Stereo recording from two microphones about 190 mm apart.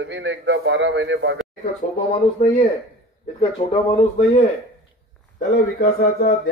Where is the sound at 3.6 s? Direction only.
30° left (ahead or behind).